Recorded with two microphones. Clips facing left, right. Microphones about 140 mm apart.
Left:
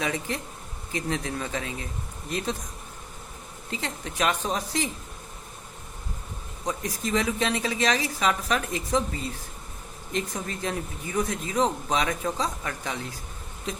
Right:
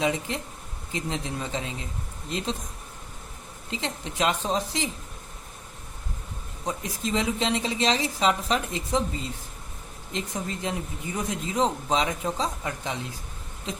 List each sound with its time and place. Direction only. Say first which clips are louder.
0.0 s speech: right 2 dB; 20° right (ahead or behind)
3.7 s speech: right 1 dB; 20° right (ahead or behind)
6.7 s speech: left 1 dB; 20° right (ahead or behind)